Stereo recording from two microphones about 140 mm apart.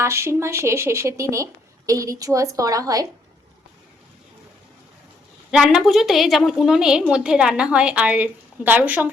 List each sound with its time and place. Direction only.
0.0 s speech: 20° right (ahead or behind)
5.5 s a woman's voice: 5° right (ahead or behind)